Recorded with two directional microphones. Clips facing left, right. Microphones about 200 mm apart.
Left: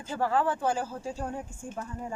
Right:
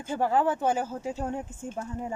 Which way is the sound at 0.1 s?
20° right (ahead or behind).